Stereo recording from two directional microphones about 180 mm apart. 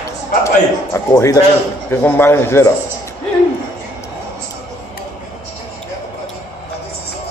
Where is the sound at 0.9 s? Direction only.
15° left (ahead or behind).